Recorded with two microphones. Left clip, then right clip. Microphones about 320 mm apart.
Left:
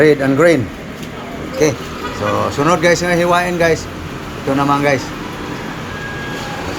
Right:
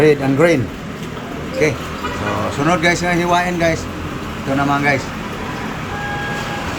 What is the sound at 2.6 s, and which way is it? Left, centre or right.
Speech, centre.